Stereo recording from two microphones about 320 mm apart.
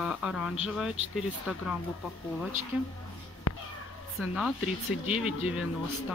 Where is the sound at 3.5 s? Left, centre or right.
Left.